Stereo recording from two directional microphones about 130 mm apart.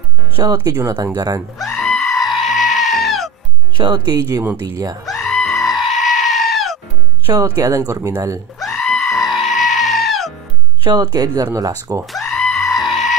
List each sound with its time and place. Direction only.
0.5 s speech: 15° right (ahead or behind)
1.6 s goat: centre (ahead or behind)
3.7 s speech: 40° right (ahead or behind)
4.4 s speech: 15° right (ahead or behind)
5.0 s goat: centre (ahead or behind)
7.6 s speech: 25° right (ahead or behind)
8.5 s goat: centre (ahead or behind)
10.8 s speech: 35° right (ahead or behind)
12.1 s goat: centre (ahead or behind)